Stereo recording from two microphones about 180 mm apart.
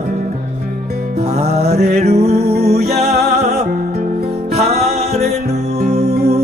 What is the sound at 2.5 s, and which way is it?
Music, 60° right (ahead or behind).